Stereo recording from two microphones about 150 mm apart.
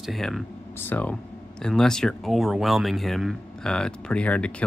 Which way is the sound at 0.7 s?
15° left (ahead or behind).